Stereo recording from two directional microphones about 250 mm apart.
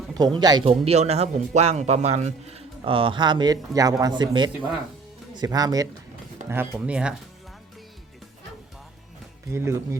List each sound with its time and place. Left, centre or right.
0.3 s speech: centre
9.5 s speech: centre